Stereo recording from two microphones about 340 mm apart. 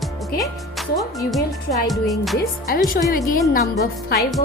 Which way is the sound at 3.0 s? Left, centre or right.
Left.